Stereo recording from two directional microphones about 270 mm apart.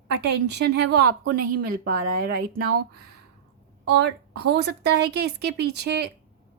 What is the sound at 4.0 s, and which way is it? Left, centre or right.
Speech, right.